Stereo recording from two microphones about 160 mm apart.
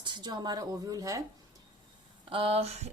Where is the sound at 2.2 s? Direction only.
35° right (ahead or behind).